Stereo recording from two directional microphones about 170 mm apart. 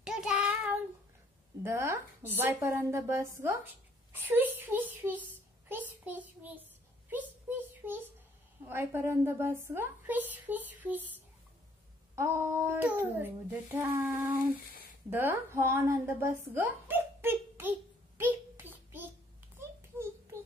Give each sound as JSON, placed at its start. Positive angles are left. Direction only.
{"t": 0.0, "sound": "child singing", "side_deg": -5}
{"t": 1.6, "sound": "a woman's voice", "side_deg": -15}
{"t": 7.1, "sound": "a sound", "side_deg": -10}
{"t": 8.6, "sound": "a woman's voice", "side_deg": -15}
{"t": 12.2, "sound": "a woman's voice", "side_deg": -15}
{"t": 15.0, "sound": "a sound", "side_deg": -10}